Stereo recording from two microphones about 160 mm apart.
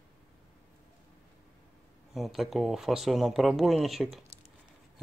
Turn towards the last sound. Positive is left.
turn(degrees=0)  # may be behind; listen again after turning